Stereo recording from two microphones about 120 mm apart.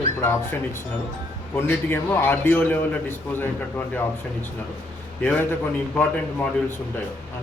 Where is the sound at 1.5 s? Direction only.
20° left (ahead or behind).